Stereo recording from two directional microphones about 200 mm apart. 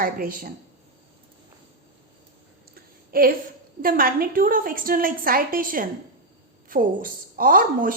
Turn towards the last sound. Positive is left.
turn(degrees=-45)  # may be behind; listen again after turning